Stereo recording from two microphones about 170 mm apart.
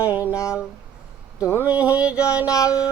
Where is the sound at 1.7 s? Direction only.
5° right (ahead or behind).